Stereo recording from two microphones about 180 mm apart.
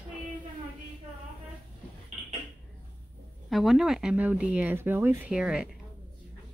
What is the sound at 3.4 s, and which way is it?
Speech, centre (ahead or behind).